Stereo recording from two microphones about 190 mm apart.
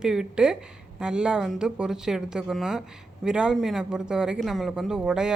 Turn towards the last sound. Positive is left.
turn(degrees=-5)  # may be behind; listen again after turning